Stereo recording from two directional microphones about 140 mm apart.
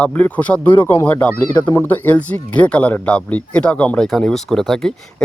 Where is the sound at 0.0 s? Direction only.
10° left (ahead or behind).